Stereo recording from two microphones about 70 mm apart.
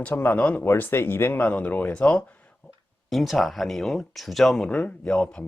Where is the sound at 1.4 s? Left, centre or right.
Centre.